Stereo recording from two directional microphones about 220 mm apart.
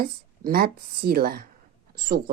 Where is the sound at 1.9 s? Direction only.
40° right (ahead or behind).